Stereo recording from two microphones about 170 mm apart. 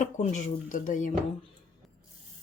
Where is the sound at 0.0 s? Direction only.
45° left (ahead or behind).